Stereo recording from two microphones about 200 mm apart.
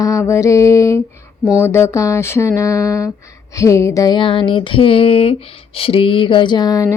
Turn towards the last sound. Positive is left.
turn(degrees=20)  # may be behind; listen again after turning